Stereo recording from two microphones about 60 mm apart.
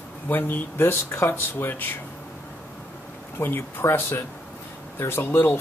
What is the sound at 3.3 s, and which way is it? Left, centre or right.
Speech, left.